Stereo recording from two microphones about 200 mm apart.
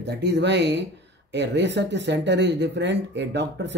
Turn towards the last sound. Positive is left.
turn(degrees=-60)  # may be behind; listen again after turning